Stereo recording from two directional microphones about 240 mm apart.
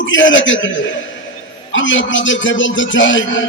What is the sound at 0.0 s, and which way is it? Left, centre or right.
Speech, left.